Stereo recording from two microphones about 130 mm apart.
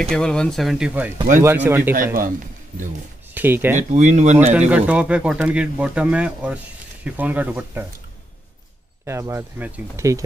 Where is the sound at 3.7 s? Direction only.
65° right (ahead or behind).